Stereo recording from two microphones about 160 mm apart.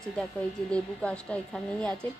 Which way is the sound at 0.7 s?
5° left (ahead or behind).